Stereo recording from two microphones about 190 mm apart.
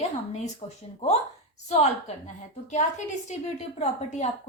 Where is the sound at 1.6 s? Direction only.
35° left (ahead or behind).